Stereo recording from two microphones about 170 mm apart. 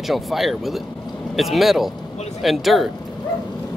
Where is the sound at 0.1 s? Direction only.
Centre (ahead or behind).